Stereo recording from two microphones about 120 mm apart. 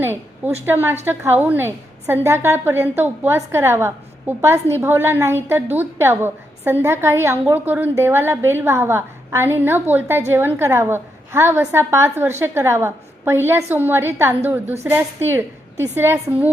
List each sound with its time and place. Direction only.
0.0 s a woman's voice: 15° right (ahead or behind)